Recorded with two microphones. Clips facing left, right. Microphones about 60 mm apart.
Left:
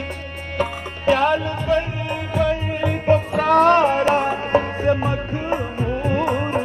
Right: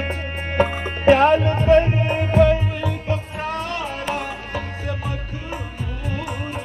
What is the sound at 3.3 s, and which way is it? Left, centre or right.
Music, left.